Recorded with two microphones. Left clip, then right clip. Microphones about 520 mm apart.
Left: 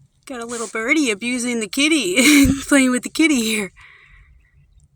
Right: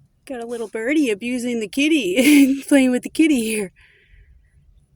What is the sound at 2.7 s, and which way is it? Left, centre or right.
A woman's voice, centre.